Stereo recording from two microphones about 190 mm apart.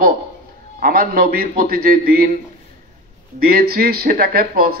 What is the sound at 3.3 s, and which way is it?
A man's voice, 50° right (ahead or behind).